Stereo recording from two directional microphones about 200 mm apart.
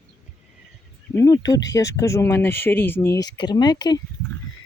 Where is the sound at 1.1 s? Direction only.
15° left (ahead or behind).